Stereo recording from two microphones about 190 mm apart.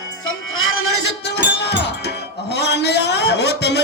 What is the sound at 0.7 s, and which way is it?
Music, 75° left (ahead or behind).